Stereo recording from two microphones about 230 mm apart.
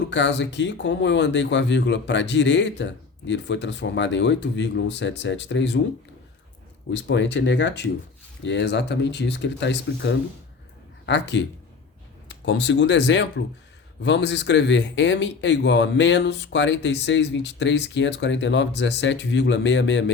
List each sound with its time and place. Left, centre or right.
0.1 s speech: left
6.9 s speech: left